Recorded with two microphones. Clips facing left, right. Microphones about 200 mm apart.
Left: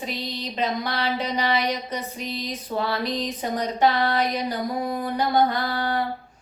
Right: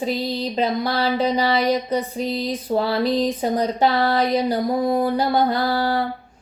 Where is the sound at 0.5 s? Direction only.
35° right (ahead or behind).